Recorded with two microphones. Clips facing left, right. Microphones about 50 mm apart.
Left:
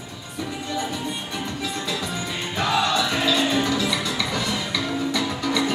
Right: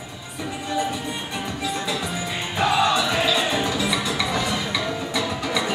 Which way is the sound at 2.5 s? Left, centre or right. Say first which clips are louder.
Right 2 dB; centre.